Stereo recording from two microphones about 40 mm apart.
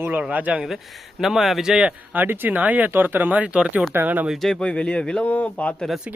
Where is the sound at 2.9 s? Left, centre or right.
Right.